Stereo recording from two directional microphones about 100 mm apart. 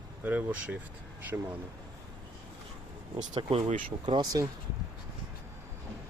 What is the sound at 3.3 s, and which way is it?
Speech, 60° right (ahead or behind).